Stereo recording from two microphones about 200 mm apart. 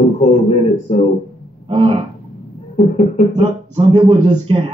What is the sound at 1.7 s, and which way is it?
Speech, 25° right (ahead or behind).